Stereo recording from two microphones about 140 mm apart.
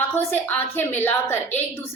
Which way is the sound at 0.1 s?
15° left (ahead or behind).